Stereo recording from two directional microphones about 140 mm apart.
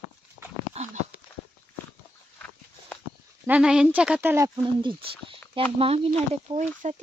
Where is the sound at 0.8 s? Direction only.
50° right (ahead or behind).